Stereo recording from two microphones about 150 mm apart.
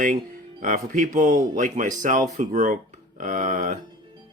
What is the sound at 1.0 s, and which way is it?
Speech, 60° right (ahead or behind).